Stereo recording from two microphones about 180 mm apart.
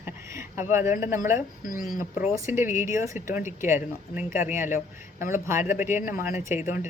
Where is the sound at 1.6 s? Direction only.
50° left (ahead or behind).